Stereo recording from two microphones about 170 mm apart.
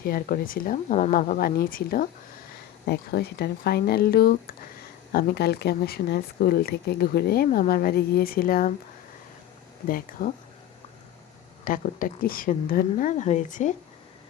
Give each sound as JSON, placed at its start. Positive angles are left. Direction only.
{"t": 0.0, "sound": "speech", "side_deg": 60}
{"t": 1.1, "sound": "speech", "side_deg": 55}
{"t": 2.8, "sound": "speech", "side_deg": 70}
{"t": 9.9, "sound": "speech", "side_deg": 55}
{"t": 11.6, "sound": "speech", "side_deg": 55}